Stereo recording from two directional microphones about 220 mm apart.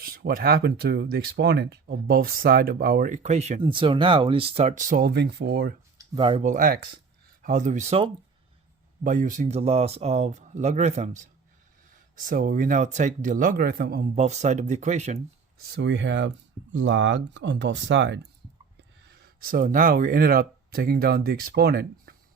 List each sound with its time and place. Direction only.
0.0 s speech: 45° right (ahead or behind)
6.1 s speech: 25° right (ahead or behind); by 14.1 s 45° right (ahead or behind)
14.2 s speech: 30° right (ahead or behind)
15.7 s speech: 55° right (ahead or behind)